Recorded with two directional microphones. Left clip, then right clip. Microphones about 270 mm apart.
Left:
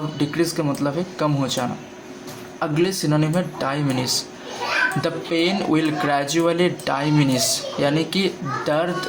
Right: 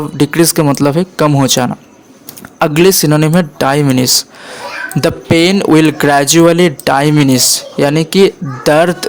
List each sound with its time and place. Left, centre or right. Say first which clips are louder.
0.2 s a man's voice: right 12 dB; right